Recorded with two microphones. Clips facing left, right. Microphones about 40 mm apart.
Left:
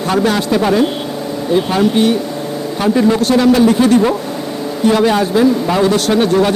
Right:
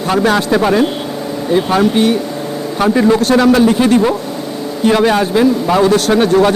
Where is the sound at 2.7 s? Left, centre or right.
Right.